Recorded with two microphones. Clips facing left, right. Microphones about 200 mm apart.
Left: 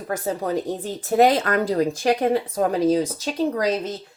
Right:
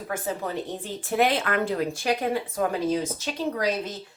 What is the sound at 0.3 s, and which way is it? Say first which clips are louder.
Speech: left 7 dB; 40° left (ahead or behind).